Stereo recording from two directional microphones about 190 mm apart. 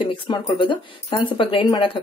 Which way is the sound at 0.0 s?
25° left (ahead or behind).